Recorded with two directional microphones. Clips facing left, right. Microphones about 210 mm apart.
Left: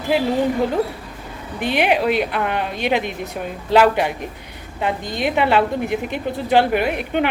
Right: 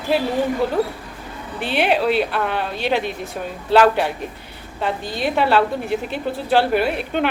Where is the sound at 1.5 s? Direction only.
15° left (ahead or behind).